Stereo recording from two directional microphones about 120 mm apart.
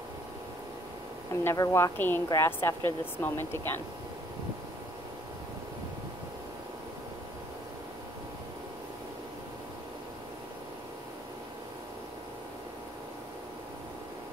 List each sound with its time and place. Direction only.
1.3 s speech: 25° left (ahead or behind)